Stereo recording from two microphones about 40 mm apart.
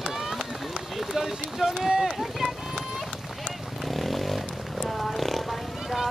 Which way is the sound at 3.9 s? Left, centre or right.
Centre.